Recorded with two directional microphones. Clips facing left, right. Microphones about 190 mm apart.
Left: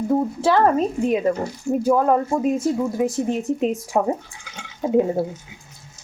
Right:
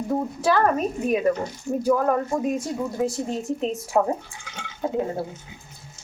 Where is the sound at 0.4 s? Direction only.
25° left (ahead or behind).